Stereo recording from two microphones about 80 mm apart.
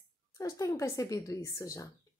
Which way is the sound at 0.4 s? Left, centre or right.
Left.